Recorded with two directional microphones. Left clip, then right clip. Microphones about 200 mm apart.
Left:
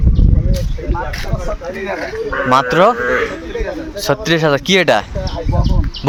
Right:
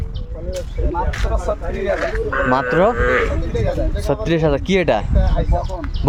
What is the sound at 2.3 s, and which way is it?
Speech, 25° left (ahead or behind).